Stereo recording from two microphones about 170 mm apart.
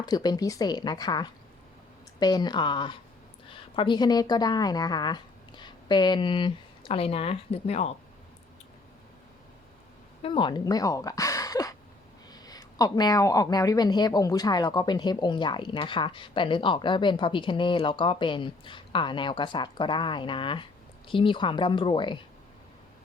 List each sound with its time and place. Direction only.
0.0 s a woman's voice: 25° left (ahead or behind); by 7.9 s 40° left (ahead or behind)
10.2 s speech: 30° left (ahead or behind)